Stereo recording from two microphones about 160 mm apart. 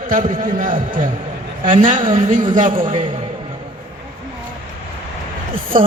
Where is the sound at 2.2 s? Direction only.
50° right (ahead or behind).